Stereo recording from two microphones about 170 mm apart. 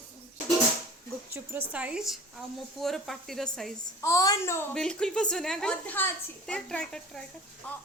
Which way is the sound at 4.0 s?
20° left (ahead or behind).